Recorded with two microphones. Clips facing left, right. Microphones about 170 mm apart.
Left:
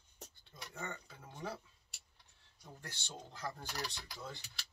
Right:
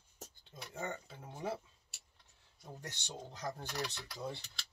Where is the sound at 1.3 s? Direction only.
10° right (ahead or behind).